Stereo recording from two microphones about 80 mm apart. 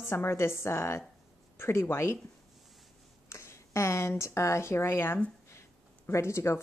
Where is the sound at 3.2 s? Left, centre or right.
Left.